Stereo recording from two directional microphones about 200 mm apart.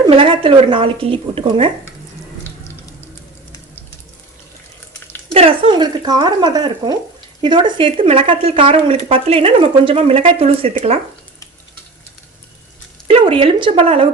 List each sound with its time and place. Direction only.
0.0 s speech: 25° right (ahead or behind)
5.3 s speech: 30° right (ahead or behind)
13.1 s speech: 25° right (ahead or behind)